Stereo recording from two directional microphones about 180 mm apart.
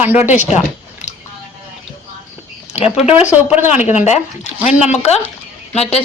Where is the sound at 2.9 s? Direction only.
35° left (ahead or behind).